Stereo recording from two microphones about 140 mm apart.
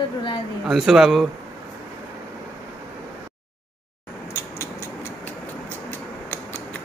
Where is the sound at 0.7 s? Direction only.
Centre (ahead or behind).